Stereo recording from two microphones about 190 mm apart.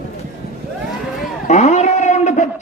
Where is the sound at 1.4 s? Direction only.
35° left (ahead or behind).